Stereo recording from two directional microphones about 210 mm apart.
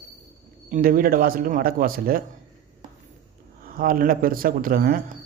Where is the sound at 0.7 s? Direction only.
40° right (ahead or behind).